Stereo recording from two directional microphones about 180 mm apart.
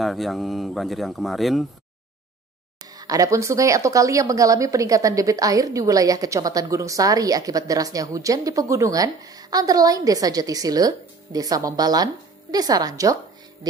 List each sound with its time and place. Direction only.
0.0 s speech: centre (ahead or behind)
2.9 s speech: 20° right (ahead or behind)